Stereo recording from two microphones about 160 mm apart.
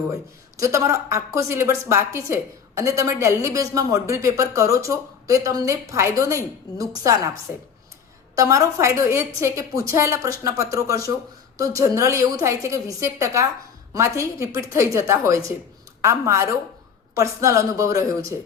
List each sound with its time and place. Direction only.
0.1 s speech: 20° right (ahead or behind)
8.4 s a woman's voice: 20° right (ahead or behind)